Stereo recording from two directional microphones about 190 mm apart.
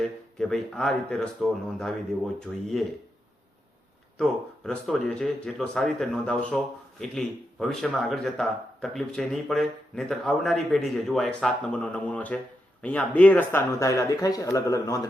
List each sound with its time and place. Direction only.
0.0 s speech: 5° left (ahead or behind)
4.2 s speech: 5° left (ahead or behind)